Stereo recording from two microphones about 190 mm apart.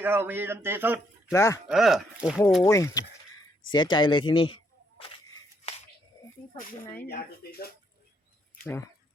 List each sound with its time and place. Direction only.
0.0 s speech: 10° right (ahead or behind)
1.3 s speech: 15° left (ahead or behind)
1.6 s speech: centre (ahead or behind)
2.6 s speech: 15° left (ahead or behind)
3.7 s a sound: 25° left (ahead or behind)
7.1 s speech: 55° left (ahead or behind)
8.5 s a sound: 10° left (ahead or behind)